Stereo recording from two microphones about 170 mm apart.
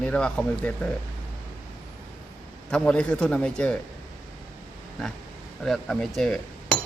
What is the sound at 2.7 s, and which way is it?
A man's voice, 5° left (ahead or behind).